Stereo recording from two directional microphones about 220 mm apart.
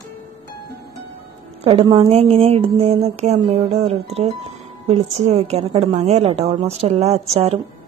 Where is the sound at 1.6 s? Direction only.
20° right (ahead or behind).